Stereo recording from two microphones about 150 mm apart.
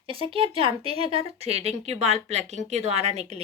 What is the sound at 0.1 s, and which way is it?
Speech, 35° right (ahead or behind).